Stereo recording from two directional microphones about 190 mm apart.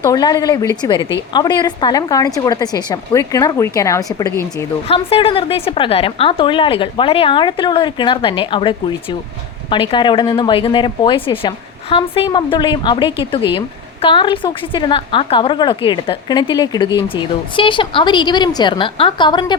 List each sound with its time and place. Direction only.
0.0 s a woman's voice: 20° left (ahead or behind)
4.9 s a woman's voice: 30° left (ahead or behind)